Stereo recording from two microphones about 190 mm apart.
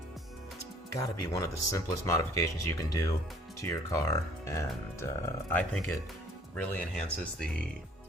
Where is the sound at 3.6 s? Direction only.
15° left (ahead or behind).